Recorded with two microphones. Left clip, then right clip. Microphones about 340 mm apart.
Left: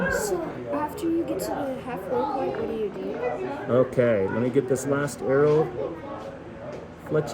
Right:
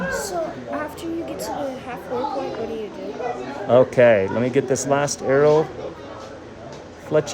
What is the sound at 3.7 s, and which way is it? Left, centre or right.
Speech, right.